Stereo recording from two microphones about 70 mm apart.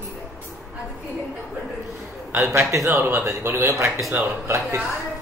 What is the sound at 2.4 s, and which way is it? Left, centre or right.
A man's voice, right.